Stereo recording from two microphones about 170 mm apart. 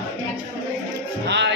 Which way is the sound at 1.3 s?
90° right.